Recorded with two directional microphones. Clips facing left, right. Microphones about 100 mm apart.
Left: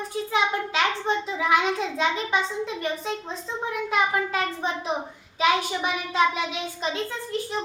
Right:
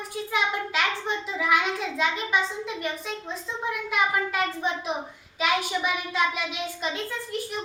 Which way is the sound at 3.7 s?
35° left (ahead or behind).